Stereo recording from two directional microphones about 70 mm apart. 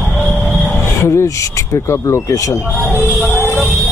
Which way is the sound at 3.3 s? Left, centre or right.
Left.